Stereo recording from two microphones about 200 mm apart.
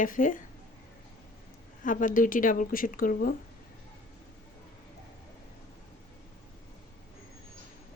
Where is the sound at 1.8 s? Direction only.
40° left (ahead or behind).